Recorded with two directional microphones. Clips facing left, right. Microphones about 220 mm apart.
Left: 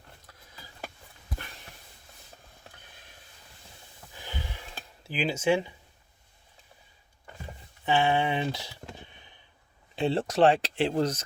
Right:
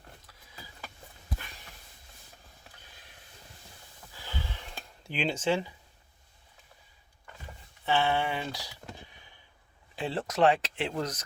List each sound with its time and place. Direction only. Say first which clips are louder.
4.1 s a sound: left 1 dB; 15° left (ahead or behind)
5.0 s speech: left 3 dB; 5° left (ahead or behind)
7.9 s speech: left 3 dB; 15° left (ahead or behind)
9.9 s speech: left 6 dB; 25° left (ahead or behind)